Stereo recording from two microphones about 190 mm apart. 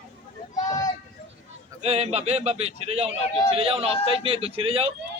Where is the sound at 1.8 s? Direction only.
35° right (ahead or behind).